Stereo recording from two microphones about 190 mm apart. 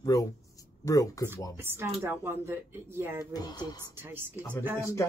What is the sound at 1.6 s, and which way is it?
Speech, 10° right (ahead or behind).